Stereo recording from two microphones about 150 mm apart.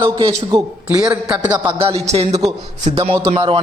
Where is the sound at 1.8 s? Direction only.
45° right (ahead or behind).